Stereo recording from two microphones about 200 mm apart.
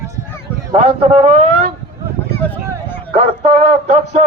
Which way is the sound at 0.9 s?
30° right (ahead or behind).